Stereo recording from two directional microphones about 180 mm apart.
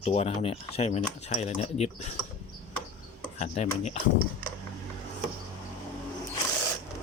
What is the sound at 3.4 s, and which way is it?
Speech, 35° left (ahead or behind).